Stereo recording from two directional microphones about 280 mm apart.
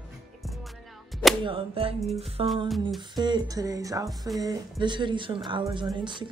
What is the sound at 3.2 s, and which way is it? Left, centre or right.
Speech, centre.